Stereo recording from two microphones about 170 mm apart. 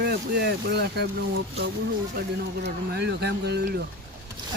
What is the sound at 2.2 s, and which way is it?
Speech, 85° right.